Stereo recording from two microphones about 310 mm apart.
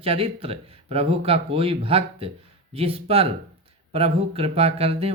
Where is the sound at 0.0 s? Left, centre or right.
Centre.